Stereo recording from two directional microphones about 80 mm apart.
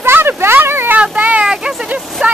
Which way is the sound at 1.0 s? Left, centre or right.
Centre.